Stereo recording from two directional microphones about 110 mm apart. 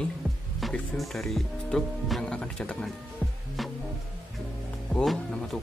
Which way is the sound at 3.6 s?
Centre (ahead or behind).